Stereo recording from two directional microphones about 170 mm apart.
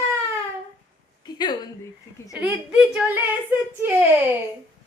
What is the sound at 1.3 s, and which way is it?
Speech, 25° left (ahead or behind).